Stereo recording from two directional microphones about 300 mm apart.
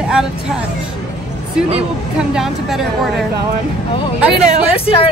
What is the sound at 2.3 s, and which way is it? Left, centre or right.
Speech, centre.